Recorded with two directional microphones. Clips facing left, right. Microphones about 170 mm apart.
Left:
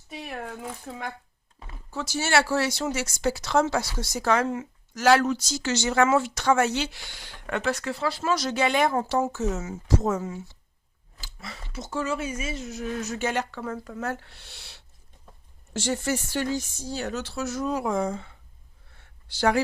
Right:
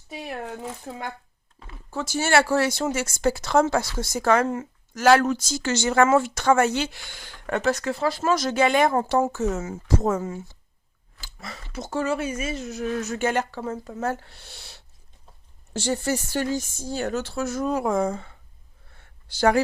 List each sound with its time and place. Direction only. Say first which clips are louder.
1.9 s speech: right 3 dB; 50° right (ahead or behind)
13.6 s speech: right 3 dB; 25° right (ahead or behind)
14.1 s speech: right 3 dB; 45° right (ahead or behind)
19.3 s speech: right 3 dB; 45° right (ahead or behind)